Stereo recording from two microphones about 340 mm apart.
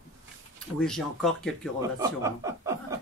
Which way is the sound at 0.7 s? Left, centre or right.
Centre.